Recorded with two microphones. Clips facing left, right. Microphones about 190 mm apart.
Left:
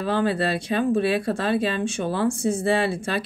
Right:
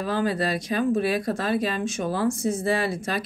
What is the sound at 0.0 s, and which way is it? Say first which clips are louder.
Speech: left 2 dB; 30° left (ahead or behind).